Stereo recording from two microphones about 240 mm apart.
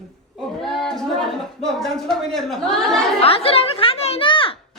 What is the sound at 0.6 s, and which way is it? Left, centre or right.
Speech, centre.